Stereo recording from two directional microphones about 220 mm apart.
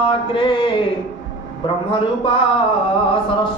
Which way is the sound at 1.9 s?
25° left (ahead or behind).